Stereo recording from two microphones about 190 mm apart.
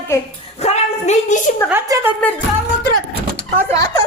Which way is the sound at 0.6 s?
35° left (ahead or behind).